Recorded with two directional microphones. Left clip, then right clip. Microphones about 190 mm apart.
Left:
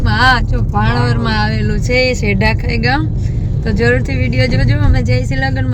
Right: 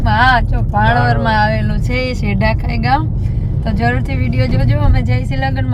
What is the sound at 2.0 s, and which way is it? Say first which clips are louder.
Speech: left 5 dB; 45° right (ahead or behind).